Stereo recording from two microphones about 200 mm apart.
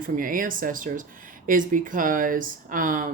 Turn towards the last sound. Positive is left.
turn(degrees=-40)  # may be behind; listen again after turning